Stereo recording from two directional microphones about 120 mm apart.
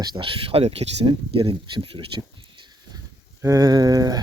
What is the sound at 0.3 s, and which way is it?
Speech, 50° right (ahead or behind).